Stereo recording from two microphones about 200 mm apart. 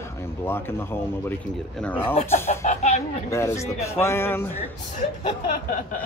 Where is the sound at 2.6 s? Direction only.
35° left (ahead or behind).